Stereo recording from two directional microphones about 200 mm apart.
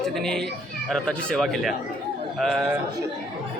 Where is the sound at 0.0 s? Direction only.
Centre (ahead or behind).